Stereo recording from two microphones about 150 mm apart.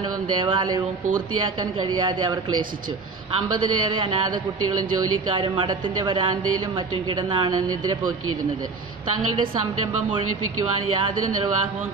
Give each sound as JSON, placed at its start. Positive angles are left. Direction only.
{"t": 0.4, "sound": "a woman's voice", "side_deg": -30}
{"t": 5.4, "sound": "speech", "side_deg": -30}